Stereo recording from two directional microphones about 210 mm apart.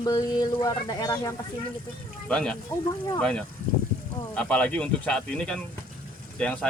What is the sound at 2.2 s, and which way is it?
Speech, 5° left (ahead or behind).